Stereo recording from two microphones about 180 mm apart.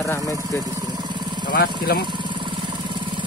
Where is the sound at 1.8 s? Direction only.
60° left (ahead or behind).